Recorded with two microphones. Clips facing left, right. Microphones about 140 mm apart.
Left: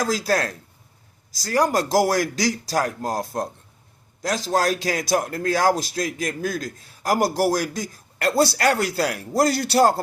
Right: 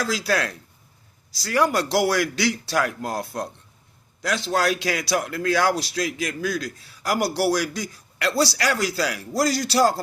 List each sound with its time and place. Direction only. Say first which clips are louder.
0.0 s a man's voice: left 2 dB; 45° left (ahead or behind)